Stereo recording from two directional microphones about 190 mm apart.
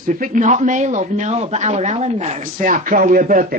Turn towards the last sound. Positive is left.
turn(degrees=-45)  # may be behind; listen again after turning